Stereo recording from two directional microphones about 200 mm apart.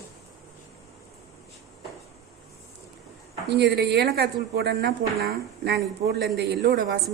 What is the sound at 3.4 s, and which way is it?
A woman's voice, 55° right (ahead or behind).